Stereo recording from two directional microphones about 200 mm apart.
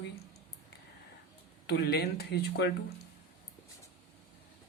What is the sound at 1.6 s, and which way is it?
Speech, 55° left (ahead or behind).